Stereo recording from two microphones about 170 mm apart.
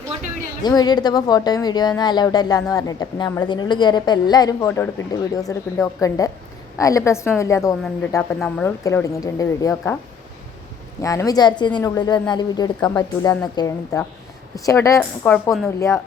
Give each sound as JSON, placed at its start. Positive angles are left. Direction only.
{"t": 0.6, "sound": "speech", "side_deg": 25}
{"t": 8.4, "sound": "speech", "side_deg": 5}
{"t": 8.8, "sound": "speech", "side_deg": 15}
{"t": 11.0, "sound": "speech", "side_deg": 20}